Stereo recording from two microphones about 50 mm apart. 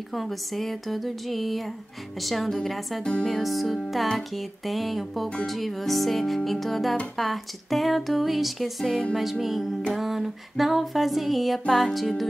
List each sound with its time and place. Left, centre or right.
0.1 s speech: centre
3.0 s speech: left
3.3 s speech: centre